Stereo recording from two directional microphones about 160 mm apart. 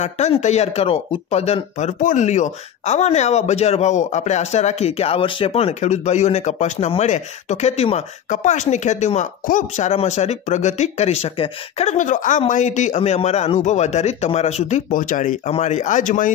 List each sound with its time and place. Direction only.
0.0 s speech: 45° left (ahead or behind)